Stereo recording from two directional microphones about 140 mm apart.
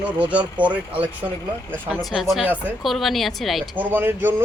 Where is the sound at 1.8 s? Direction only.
5° left (ahead or behind).